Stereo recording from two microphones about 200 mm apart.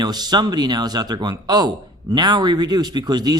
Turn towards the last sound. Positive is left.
turn(degrees=-20)  # may be behind; listen again after turning